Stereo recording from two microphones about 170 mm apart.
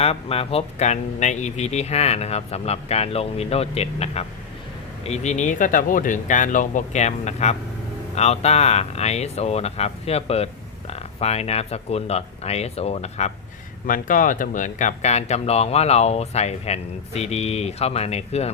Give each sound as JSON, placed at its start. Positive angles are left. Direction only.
{"t": 0.0, "sound": "speech", "side_deg": 35}
{"t": 13.8, "sound": "speech", "side_deg": 55}